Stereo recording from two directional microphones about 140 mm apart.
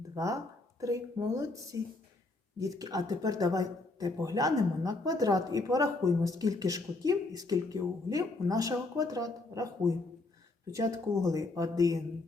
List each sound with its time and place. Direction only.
0.1 s speech: 25° right (ahead or behind)